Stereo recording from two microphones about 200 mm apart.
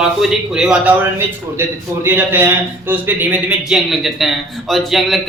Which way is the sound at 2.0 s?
10° right (ahead or behind).